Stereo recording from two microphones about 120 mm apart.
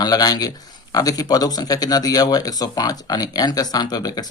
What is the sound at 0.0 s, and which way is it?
Speech, 35° left (ahead or behind).